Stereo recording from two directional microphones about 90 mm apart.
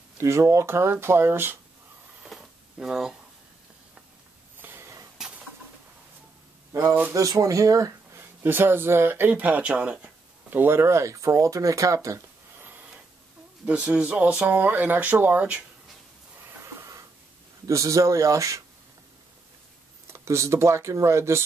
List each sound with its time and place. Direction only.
0.2 s speech: 35° right (ahead or behind)
2.2 s a sound: 5° right (ahead or behind)
4.6 s a sound: 25° right (ahead or behind)
6.8 s speech: 20° right (ahead or behind)
7.2 s speech: 40° right (ahead or behind)
8.2 s speech: 25° right (ahead or behind)
13.7 s speech: 15° right (ahead or behind)
17.6 s speech: 35° right (ahead or behind)
20.1 s speech: 30° right (ahead or behind)